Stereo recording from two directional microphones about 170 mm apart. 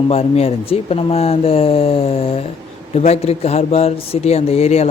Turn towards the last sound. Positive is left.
turn(degrees=40)  # may be behind; listen again after turning